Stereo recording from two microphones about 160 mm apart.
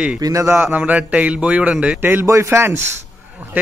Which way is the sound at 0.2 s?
20° right (ahead or behind).